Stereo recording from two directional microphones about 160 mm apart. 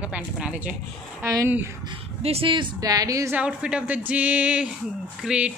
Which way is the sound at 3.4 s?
5° right (ahead or behind).